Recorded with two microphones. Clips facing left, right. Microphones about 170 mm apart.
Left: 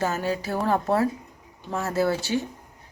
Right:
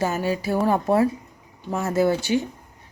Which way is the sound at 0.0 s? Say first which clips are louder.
Right 2 dB; 10° right (ahead or behind).